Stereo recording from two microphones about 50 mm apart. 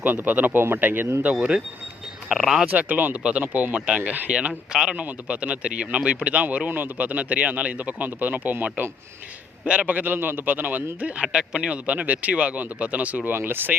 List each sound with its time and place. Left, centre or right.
0.0 s a man's voice: right
1.4 s speech: centre
2.7 s a man's voice: right
4.3 s speech: right
4.9 s speech: right
6.7 s a man's voice: right
9.8 s a man's voice: right
11.0 s a man's voice: right
13.3 s speech: right